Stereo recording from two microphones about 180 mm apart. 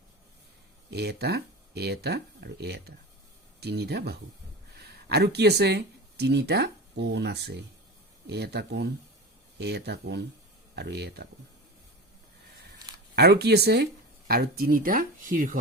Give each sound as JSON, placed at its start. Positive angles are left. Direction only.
{"t": 0.9, "sound": "speech", "side_deg": -65}
{"t": 13.1, "sound": "speech", "side_deg": -65}